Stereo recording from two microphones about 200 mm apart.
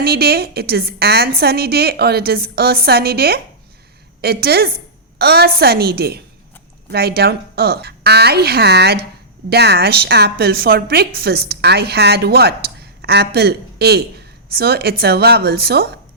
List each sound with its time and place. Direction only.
0.0 s a woman's voice: 50° right (ahead or behind)